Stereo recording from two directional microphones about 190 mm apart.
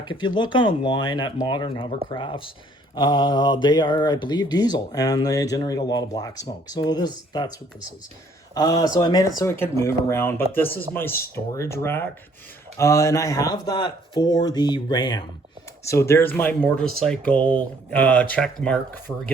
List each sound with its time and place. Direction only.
0.0 s speech: 25° left (ahead or behind)
8.5 s speech: 20° left (ahead or behind)